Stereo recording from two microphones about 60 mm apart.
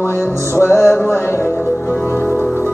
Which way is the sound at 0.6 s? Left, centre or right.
Left.